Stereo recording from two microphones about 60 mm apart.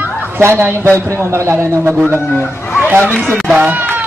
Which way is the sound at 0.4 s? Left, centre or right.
Right.